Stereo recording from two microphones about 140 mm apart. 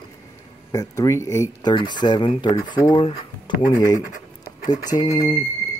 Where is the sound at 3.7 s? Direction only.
25° left (ahead or behind).